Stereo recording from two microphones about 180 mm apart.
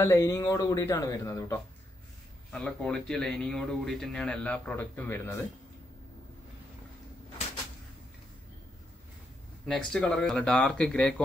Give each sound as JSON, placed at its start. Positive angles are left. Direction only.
{"t": 0.0, "sound": "speech", "side_deg": 15}
{"t": 2.5, "sound": "speech", "side_deg": 5}
{"t": 9.7, "sound": "speech", "side_deg": 5}